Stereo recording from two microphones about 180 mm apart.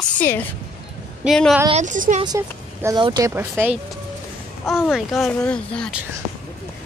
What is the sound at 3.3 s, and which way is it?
Speech, 10° right (ahead or behind).